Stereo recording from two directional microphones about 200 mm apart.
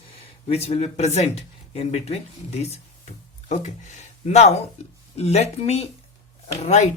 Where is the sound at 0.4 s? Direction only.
30° left (ahead or behind).